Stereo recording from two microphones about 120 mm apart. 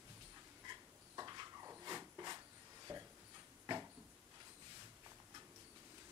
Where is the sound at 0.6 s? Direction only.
30° right (ahead or behind).